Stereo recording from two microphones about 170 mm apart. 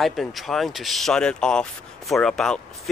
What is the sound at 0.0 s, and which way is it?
Speech, centre (ahead or behind).